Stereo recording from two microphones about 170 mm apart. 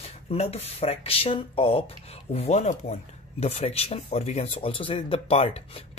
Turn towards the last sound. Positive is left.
turn(degrees=35)  # may be behind; listen again after turning